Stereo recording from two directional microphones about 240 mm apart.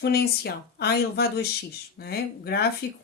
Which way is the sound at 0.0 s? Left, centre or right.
Left.